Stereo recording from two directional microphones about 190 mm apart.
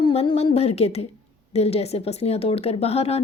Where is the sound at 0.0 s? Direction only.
30° left (ahead or behind).